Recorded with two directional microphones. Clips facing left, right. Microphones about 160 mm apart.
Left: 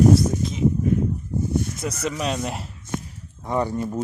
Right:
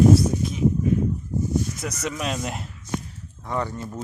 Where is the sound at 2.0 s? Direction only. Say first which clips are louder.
Left 3 dB; centre (ahead or behind).